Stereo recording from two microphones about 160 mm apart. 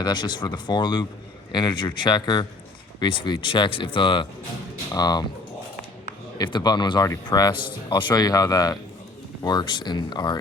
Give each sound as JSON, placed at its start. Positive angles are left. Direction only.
{"t": 0.0, "sound": "speech", "side_deg": 25}
{"t": 6.3, "sound": "speech", "side_deg": 25}